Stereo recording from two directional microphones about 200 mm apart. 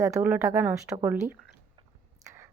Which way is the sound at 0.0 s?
15° right (ahead or behind).